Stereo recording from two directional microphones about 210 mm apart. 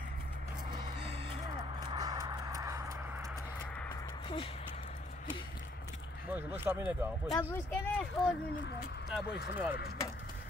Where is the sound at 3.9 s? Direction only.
20° left (ahead or behind).